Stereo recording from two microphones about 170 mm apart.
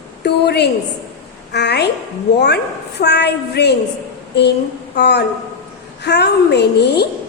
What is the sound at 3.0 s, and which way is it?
Speech, 75° left (ahead or behind).